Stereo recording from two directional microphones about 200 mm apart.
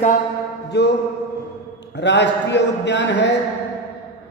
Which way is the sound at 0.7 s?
55° left (ahead or behind).